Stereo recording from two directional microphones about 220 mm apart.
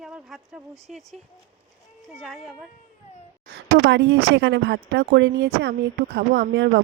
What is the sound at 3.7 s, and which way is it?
Speech, 55° right (ahead or behind).